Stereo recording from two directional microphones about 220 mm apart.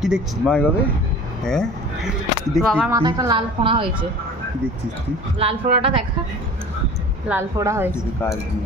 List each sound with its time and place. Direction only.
0.0 s speech: centre (ahead or behind)
2.9 s a woman's voice: 20° right (ahead or behind)
5.4 s a woman's voice: 25° right (ahead or behind)
7.2 s a woman's voice: 10° right (ahead or behind)